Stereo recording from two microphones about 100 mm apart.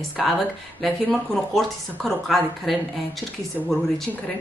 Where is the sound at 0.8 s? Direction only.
5° left (ahead or behind).